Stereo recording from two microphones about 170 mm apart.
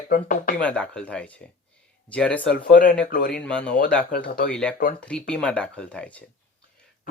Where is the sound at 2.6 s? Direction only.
50° left (ahead or behind).